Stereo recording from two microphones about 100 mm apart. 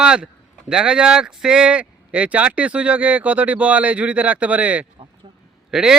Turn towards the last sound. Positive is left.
turn(degrees=-5)  # may be behind; listen again after turning